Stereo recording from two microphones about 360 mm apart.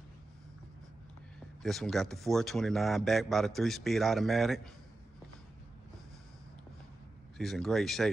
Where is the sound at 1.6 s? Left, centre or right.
Centre.